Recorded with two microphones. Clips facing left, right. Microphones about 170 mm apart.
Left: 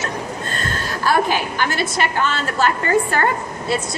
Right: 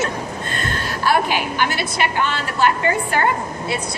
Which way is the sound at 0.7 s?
40° left (ahead or behind).